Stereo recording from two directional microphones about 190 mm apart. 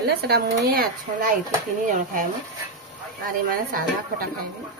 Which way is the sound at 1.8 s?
40° right (ahead or behind).